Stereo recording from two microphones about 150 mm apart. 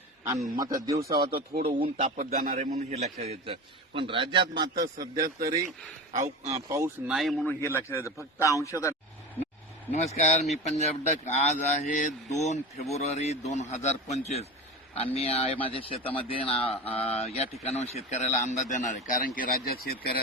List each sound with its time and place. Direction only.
0.6 s speech: 20° right (ahead or behind)
1.3 s speech: 90° right
1.6 s a man's voice: 35° right (ahead or behind)
2.1 s speech: 65° right (ahead or behind)
2.7 s a man's voice: 45° right (ahead or behind); by 5.5 s 25° right (ahead or behind)
6.1 s speech: 50° right (ahead or behind)
6.7 s speech: 20° right (ahead or behind)
7.1 s a man's voice: centre (ahead or behind)
7.4 s a man's voice: 15° left (ahead or behind)
9.9 s speech: 50° left (ahead or behind); by 20.2 s 85° left